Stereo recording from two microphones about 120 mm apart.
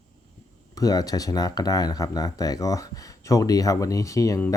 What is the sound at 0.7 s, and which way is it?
Speech, 30° left (ahead or behind).